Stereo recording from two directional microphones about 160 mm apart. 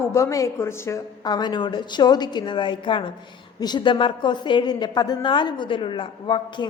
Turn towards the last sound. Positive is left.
turn(degrees=30)  # may be behind; listen again after turning